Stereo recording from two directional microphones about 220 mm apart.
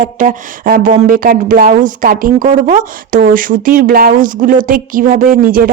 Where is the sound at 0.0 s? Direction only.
40° right (ahead or behind).